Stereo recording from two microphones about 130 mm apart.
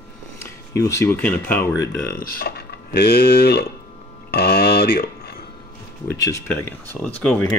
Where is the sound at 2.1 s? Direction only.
90° left.